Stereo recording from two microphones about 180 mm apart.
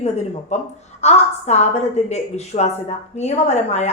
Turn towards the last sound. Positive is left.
turn(degrees=35)  # may be behind; listen again after turning